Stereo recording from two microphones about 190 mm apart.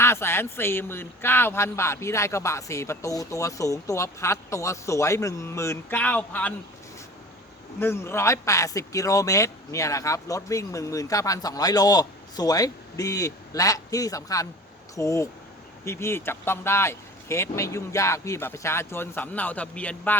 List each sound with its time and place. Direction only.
0.0 s speech: 15° left (ahead or behind)
7.8 s speech: 10° left (ahead or behind)